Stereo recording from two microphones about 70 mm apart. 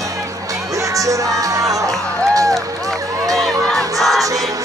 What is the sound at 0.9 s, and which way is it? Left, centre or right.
Music, right.